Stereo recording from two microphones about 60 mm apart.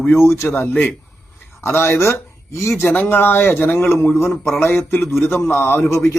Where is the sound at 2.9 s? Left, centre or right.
Left.